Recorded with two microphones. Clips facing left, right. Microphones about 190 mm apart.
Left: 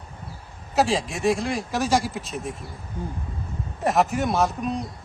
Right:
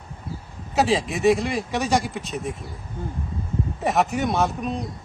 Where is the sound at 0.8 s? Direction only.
Centre (ahead or behind).